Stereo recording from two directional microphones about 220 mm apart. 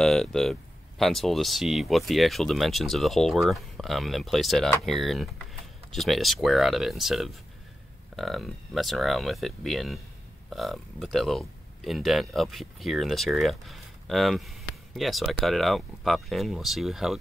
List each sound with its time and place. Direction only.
0.0 s speech: centre (ahead or behind)